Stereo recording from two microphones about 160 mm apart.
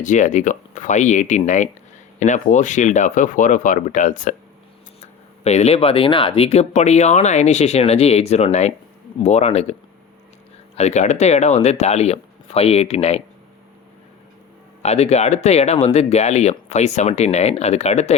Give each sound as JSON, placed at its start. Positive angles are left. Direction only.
{"t": 0.0, "sound": "speech", "side_deg": 50}
{"t": 5.4, "sound": "speech", "side_deg": 40}
{"t": 10.8, "sound": "speech", "side_deg": 45}
{"t": 14.8, "sound": "speech", "side_deg": 40}